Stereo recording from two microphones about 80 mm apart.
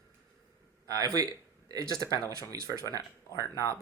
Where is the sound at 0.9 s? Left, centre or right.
Right.